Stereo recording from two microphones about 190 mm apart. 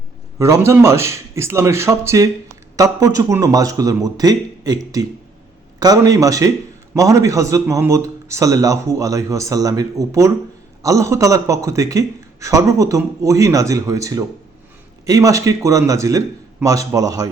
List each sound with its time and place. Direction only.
0.3 s a man's voice: 15° right (ahead or behind)